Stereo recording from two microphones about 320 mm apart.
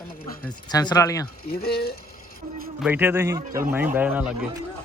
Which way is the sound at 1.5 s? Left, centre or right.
Left.